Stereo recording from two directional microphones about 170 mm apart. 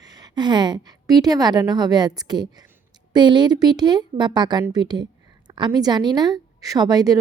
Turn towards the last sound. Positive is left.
turn(degrees=-20)  # may be behind; listen again after turning